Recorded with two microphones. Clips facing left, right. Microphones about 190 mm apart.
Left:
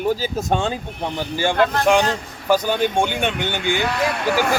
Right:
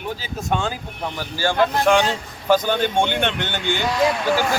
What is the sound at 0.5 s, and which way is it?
Speech, 30° left (ahead or behind).